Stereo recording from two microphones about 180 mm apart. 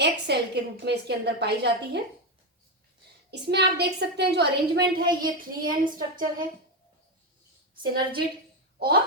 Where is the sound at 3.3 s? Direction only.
65° right (ahead or behind).